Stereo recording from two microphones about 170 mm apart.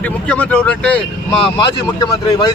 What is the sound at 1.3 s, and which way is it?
A man's voice, 25° left (ahead or behind).